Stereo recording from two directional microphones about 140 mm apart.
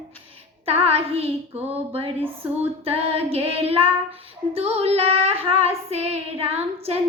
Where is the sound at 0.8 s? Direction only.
45° right (ahead or behind).